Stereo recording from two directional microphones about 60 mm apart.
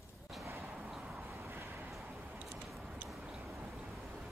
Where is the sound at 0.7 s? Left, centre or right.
Centre; by 1.9 s right.